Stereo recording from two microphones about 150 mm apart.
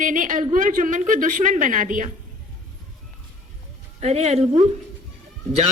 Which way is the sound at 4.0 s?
45° right (ahead or behind).